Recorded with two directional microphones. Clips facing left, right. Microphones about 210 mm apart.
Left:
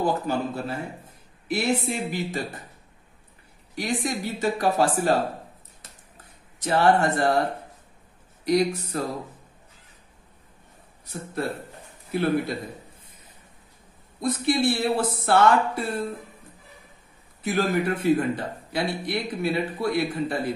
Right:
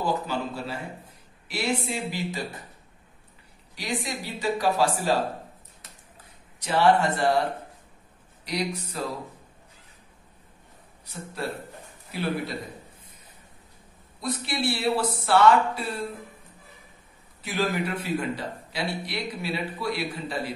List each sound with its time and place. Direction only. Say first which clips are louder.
0.0 s a man's voice: left 3 dB; 50° left (ahead or behind)
3.7 s a man's voice: left 4 dB; 50° left (ahead or behind)
6.6 s a man's voice: left 1 dB; 45° left (ahead or behind)
8.5 s a man's voice: left 8 dB; 50° left (ahead or behind)
12.1 s a man's voice: left 6 dB; 50° left (ahead or behind)
14.2 s a man's voice: left 6 dB; 50° left (ahead or behind)
17.4 s a man's voice: left 3 dB; 50° left (ahead or behind)